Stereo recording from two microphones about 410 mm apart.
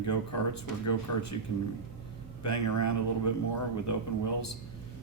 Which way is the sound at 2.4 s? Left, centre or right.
Left.